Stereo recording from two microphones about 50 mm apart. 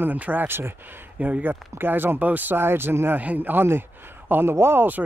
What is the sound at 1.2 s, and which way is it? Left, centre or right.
Speech, right.